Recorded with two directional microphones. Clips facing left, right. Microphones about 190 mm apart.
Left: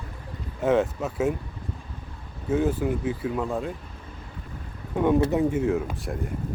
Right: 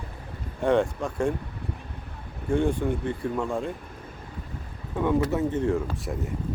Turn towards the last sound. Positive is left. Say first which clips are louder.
# even
turn(degrees=0)  # may be behind; listen again after turning